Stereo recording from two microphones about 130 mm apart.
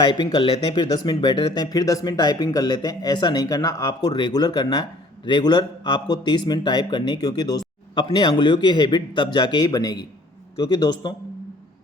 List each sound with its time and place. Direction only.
0.0 s speech: 35° left (ahead or behind)